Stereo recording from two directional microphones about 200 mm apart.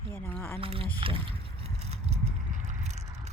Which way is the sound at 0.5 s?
25° right (ahead or behind).